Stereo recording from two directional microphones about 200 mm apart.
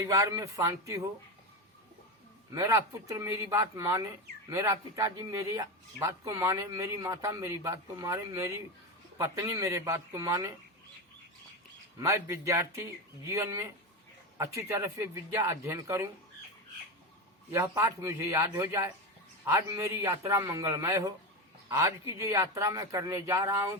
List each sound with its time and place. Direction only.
0.0 s speech: 15° right (ahead or behind)
2.6 s speech: 15° right (ahead or behind)
11.9 s speech: 15° right (ahead or behind)
17.5 s speech: 15° right (ahead or behind)